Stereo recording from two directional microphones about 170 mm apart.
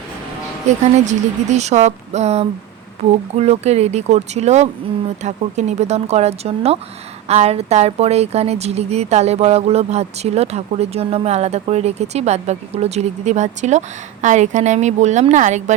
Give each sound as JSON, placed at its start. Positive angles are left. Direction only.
{"t": 0.7, "sound": "a woman's voice", "side_deg": -45}